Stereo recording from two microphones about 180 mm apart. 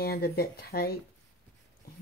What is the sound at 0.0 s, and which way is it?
Speech, 60° left (ahead or behind).